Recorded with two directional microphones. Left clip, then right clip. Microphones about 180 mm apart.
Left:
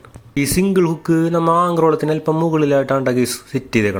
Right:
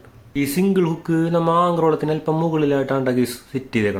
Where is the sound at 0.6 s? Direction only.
20° left (ahead or behind).